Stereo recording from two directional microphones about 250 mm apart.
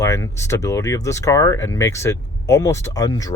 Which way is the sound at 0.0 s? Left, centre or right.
Centre.